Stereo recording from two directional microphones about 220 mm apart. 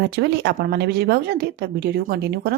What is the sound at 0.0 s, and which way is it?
Speech, 50° right (ahead or behind).